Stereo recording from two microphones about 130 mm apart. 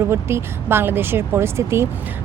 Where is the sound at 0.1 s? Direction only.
20° right (ahead or behind).